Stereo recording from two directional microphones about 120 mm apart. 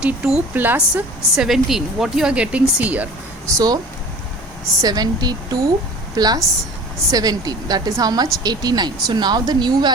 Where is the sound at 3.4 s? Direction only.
35° right (ahead or behind).